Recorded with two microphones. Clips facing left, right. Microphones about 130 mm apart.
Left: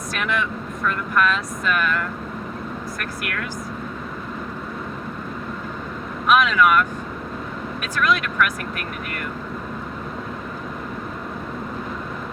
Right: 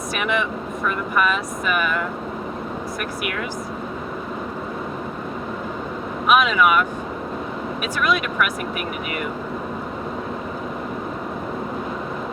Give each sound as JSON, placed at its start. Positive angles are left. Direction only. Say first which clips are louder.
{"t": 0.1, "sound": "speech", "louder": "right 2 dB", "side_deg": -5}
{"t": 6.2, "sound": "speech", "louder": "even", "side_deg": -5}